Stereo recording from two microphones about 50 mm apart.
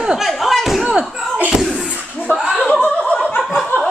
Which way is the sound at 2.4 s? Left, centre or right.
Centre.